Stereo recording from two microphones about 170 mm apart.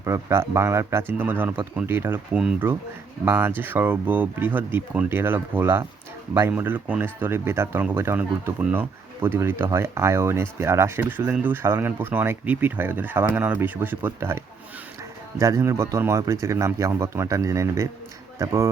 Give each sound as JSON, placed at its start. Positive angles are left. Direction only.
{"t": 0.0, "sound": "speech", "side_deg": -15}